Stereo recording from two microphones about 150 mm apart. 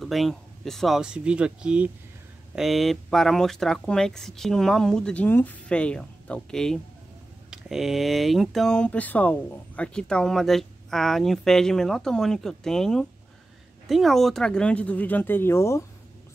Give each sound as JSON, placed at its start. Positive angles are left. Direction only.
{"t": 0.0, "sound": "speech", "side_deg": 0}